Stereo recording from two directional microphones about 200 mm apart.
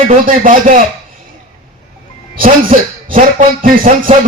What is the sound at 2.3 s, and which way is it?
A man's voice, 45° right (ahead or behind).